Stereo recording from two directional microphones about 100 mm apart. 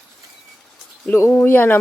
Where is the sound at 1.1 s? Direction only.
25° left (ahead or behind).